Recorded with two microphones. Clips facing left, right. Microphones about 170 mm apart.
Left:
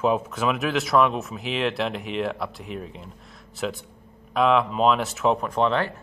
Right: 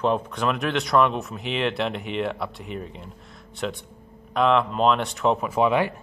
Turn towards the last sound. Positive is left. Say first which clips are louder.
# right 2 dB
turn(degrees=-10)  # may be behind; listen again after turning